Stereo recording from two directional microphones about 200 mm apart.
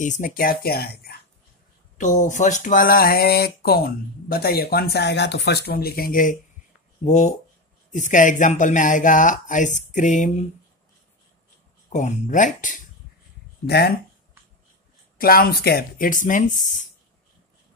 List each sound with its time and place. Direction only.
0.0 s speech: 40° left (ahead or behind)
2.0 s speech: 40° left (ahead or behind)
11.9 s speech: 40° left (ahead or behind)
13.7 s speech: 55° left (ahead or behind)
15.1 s speech: 45° left (ahead or behind)